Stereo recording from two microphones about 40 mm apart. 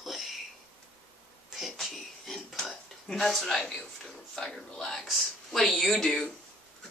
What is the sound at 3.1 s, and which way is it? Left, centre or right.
Speech, centre.